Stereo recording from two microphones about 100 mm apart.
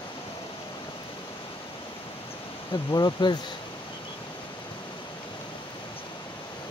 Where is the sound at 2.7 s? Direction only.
45° left (ahead or behind).